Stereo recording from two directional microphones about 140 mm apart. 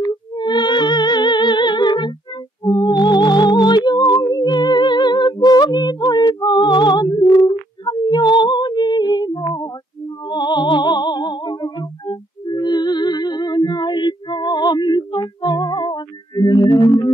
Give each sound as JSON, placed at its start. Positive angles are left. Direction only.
{"t": 0.0, "sound": "music", "side_deg": 30}